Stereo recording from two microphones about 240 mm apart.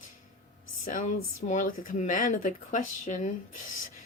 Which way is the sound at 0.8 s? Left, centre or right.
Left.